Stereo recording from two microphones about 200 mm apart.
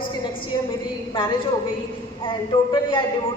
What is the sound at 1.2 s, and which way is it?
A woman's voice, 25° left (ahead or behind).